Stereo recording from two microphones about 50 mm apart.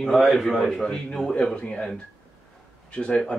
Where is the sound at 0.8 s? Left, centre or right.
Centre.